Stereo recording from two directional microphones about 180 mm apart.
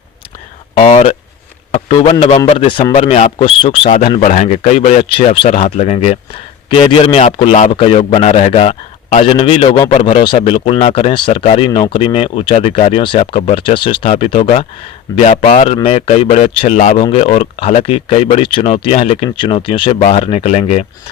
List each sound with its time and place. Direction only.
0.8 s a man's voice: 35° left (ahead or behind)
4.2 s speech: 40° left (ahead or behind)